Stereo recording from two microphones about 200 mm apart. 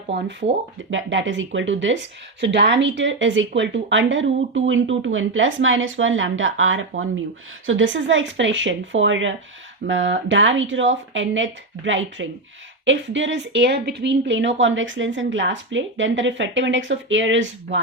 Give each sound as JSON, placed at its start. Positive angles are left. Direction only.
{"t": 0.1, "sound": "speech", "side_deg": -60}